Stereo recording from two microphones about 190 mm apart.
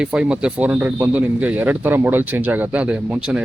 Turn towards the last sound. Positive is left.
turn(degrees=-5)  # may be behind; listen again after turning